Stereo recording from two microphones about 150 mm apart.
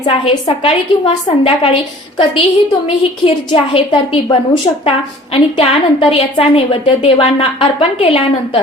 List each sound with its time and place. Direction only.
0.1 s a woman's voice: 40° left (ahead or behind)